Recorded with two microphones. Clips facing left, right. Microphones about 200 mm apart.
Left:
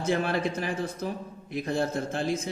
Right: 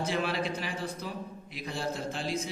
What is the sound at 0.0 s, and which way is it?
A man's voice, 50° left (ahead or behind).